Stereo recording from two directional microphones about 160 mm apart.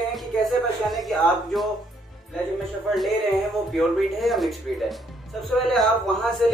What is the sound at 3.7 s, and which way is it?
A man's voice, centre (ahead or behind).